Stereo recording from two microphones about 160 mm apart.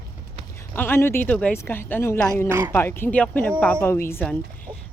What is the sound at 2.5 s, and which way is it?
Speech, 15° right (ahead or behind).